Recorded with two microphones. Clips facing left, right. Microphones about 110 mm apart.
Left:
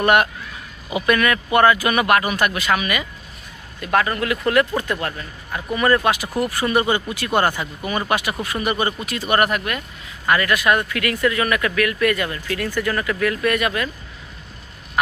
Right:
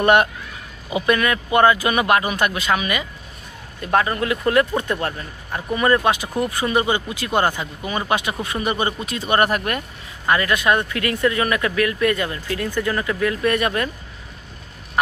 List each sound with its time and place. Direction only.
0.0 s speech: 25° right (ahead or behind)
9.6 s speech: 40° right (ahead or behind)
10.2 s speech: 25° right (ahead or behind)